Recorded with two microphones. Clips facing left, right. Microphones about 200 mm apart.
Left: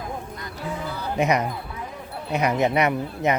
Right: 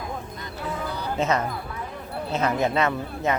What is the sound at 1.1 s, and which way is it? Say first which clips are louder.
Speech: left 2 dB; 15° left (ahead or behind).